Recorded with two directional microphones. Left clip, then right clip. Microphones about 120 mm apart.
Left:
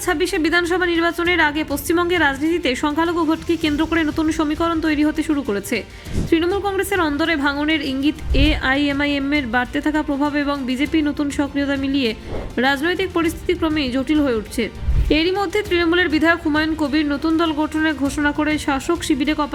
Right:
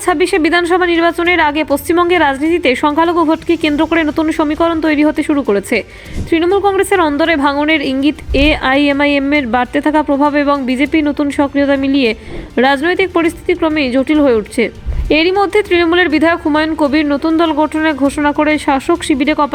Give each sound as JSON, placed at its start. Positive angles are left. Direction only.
{"t": 0.0, "sound": "a woman's voice", "side_deg": -30}